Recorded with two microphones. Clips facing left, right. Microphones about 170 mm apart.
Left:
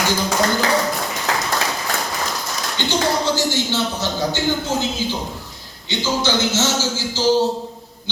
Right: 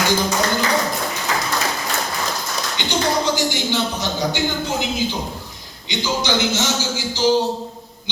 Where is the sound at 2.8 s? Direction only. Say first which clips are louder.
Left 5 dB; 15° right (ahead or behind).